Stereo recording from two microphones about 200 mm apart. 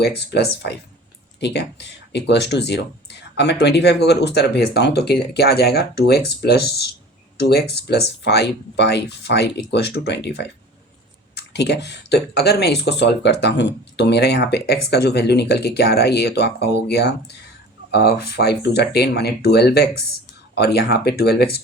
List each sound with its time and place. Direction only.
0.0 s speech: 55° left (ahead or behind)